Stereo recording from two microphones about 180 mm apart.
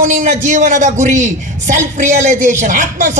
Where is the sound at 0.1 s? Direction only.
40° right (ahead or behind).